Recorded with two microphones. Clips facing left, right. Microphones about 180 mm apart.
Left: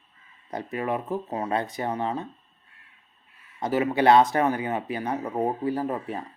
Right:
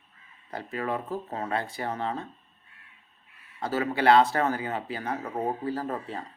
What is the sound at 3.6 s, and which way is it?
Speech, 20° left (ahead or behind).